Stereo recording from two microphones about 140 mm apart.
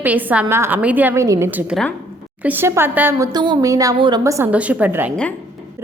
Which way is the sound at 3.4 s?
25° right (ahead or behind).